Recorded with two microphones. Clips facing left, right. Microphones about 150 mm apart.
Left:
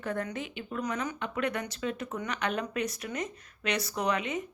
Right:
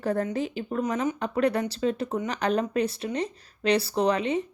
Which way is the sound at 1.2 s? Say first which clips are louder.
Right 7 dB; 35° right (ahead or behind).